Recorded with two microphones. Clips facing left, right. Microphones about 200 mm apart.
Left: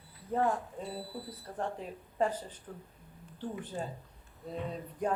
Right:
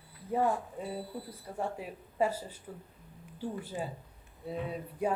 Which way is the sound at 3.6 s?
10° right (ahead or behind).